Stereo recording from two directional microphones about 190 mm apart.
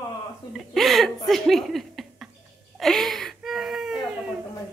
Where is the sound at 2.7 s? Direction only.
Centre (ahead or behind).